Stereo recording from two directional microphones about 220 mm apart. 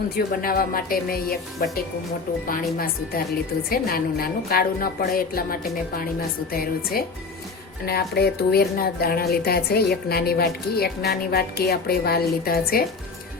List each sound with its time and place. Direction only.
0.4 s music: 40° left (ahead or behind)
3.7 s a woman's voice: 40° left (ahead or behind)
7.9 s a woman's voice: 45° left (ahead or behind)